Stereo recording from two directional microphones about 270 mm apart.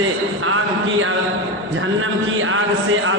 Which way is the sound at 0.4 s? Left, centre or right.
Right.